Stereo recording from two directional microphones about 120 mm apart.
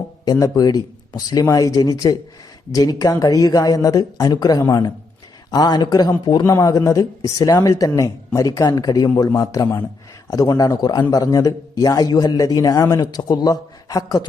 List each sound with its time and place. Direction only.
0.3 s a man's voice: 30° left (ahead or behind)